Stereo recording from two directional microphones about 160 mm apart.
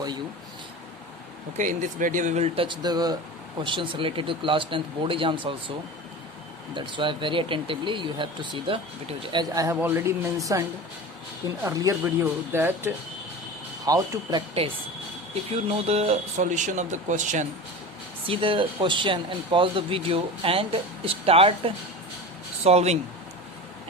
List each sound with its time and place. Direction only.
1.5 s speech: 55° right (ahead or behind); by 5.7 s 30° right (ahead or behind)
6.7 s speech: 30° right (ahead or behind)
15.9 s speech: 40° right (ahead or behind)
18.3 s speech: 35° right (ahead or behind)